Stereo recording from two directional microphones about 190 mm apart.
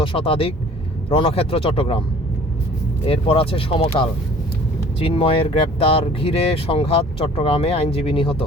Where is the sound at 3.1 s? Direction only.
30° left (ahead or behind).